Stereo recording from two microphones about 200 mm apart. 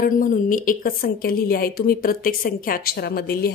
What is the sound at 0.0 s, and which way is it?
A woman's voice, 45° left (ahead or behind).